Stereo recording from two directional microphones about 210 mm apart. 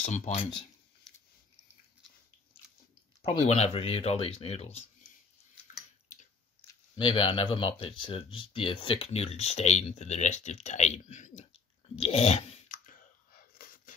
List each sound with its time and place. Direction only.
0.0 s speech: 30° left (ahead or behind)
1.1 s a sound: centre (ahead or behind)
3.3 s speech: 30° left (ahead or behind)
6.7 s speech: 25° left (ahead or behind)
11.9 s chewing: 30° left (ahead or behind)